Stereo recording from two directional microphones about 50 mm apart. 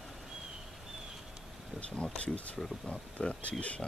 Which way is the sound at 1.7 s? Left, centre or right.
Left.